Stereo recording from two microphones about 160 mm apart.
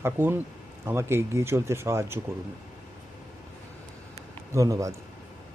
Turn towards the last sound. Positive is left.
turn(degrees=-20)  # may be behind; listen again after turning